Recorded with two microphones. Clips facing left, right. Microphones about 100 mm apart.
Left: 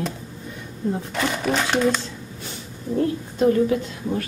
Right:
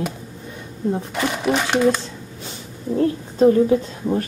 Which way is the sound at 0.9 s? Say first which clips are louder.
Right 2 dB; 15° right (ahead or behind).